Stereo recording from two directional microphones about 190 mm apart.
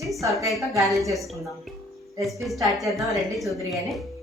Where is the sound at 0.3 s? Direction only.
Centre (ahead or behind).